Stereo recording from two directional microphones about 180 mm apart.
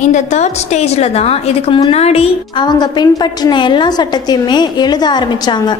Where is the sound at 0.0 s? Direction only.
40° left (ahead or behind).